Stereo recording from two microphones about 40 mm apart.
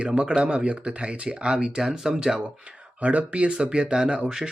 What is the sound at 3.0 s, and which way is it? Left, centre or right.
Speech, right.